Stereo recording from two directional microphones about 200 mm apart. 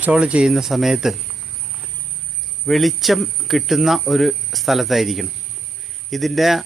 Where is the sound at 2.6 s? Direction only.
Centre (ahead or behind).